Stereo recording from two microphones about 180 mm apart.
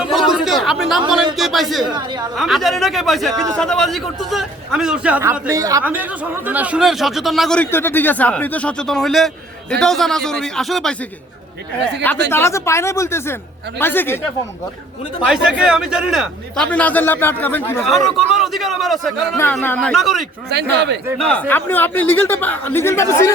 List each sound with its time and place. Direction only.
0.0 s a sound: centre (ahead or behind)
1.9 s a woman's voice: 25° right (ahead or behind)
2.3 s speech: centre (ahead or behind)
5.5 s a woman's voice: 20° right (ahead or behind); by 10.9 s centre (ahead or behind)
12.3 s speech: 15° left (ahead or behind)
15.3 s speech: 5° right (ahead or behind)
16.6 s speech: 10° left (ahead or behind)
17.8 s speech: centre (ahead or behind)
19.6 s speech: 10° left (ahead or behind)
19.9 s speech: centre (ahead or behind)
20.5 s speech: 70° right (ahead or behind)
21.2 s speech: 5° left (ahead or behind)